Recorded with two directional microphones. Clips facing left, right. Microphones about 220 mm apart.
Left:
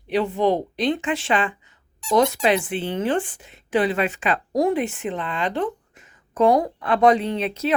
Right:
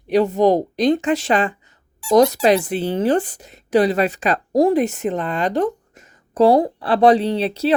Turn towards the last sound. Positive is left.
turn(degrees=-35)  # may be behind; listen again after turning